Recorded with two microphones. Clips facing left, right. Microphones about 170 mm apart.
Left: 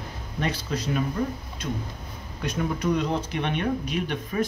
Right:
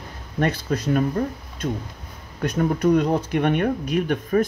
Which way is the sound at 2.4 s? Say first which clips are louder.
Right 6 dB; 50° right (ahead or behind).